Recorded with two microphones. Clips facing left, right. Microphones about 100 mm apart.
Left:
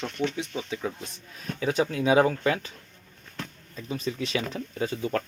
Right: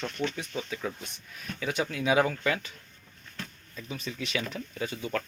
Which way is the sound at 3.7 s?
35° left (ahead or behind).